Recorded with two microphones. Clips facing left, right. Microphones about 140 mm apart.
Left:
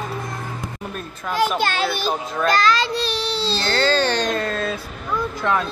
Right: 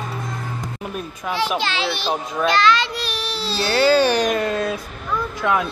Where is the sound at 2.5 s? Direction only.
40° left (ahead or behind).